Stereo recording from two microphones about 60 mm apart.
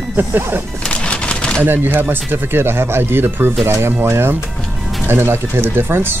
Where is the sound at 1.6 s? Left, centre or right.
Right.